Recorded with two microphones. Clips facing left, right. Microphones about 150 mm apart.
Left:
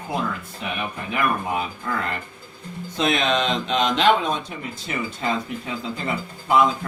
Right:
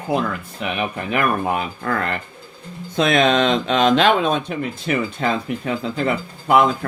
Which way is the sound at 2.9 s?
60° right (ahead or behind).